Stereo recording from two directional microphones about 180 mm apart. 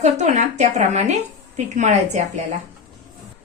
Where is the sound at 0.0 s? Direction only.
40° right (ahead or behind).